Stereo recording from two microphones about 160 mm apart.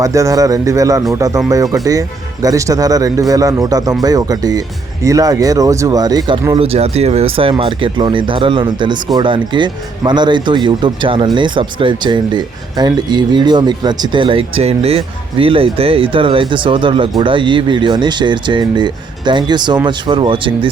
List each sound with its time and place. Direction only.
0.0 s speech: 20° right (ahead or behind)